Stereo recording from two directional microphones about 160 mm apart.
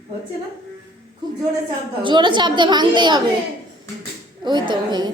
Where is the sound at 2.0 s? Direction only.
30° right (ahead or behind).